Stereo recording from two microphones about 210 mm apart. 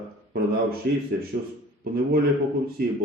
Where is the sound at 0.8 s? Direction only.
45° right (ahead or behind).